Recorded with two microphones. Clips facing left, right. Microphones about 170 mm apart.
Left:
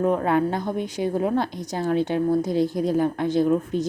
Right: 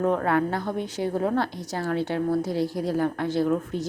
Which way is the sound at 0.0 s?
15° left (ahead or behind).